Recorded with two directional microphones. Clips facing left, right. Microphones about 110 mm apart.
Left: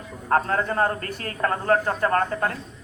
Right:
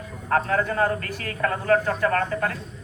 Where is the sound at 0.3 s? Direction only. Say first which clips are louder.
Even; 30° left (ahead or behind).